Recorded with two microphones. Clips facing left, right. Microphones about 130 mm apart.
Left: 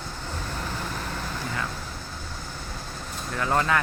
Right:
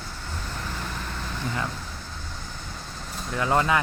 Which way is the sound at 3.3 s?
15° right (ahead or behind).